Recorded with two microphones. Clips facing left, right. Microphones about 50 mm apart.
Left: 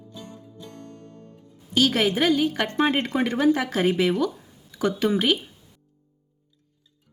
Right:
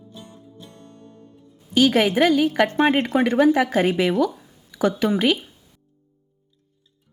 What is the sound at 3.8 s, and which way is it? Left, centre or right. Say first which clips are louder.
Speech: right 2 dB; right.